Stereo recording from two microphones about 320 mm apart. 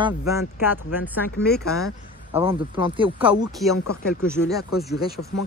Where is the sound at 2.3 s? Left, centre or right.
Centre.